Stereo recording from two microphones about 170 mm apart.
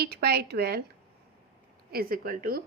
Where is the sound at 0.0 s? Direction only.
70° right (ahead or behind).